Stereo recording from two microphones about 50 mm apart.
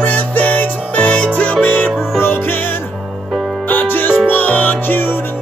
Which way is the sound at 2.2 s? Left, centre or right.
Left.